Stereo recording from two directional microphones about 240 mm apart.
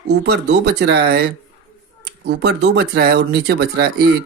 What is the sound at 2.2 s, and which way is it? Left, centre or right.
Speech, right.